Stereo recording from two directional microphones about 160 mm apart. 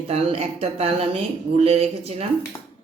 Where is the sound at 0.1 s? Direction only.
40° right (ahead or behind).